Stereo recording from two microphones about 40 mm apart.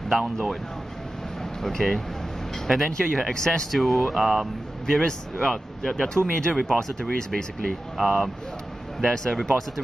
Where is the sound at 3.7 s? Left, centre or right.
Centre.